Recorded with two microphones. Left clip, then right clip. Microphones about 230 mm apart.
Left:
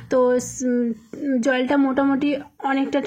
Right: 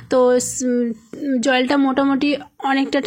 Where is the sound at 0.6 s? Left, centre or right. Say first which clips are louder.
Right 2 dB; right.